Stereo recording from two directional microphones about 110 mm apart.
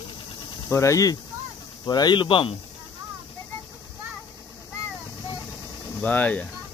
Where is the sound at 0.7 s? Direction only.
30° left (ahead or behind).